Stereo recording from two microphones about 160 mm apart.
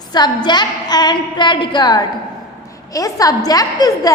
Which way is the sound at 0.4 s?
25° left (ahead or behind).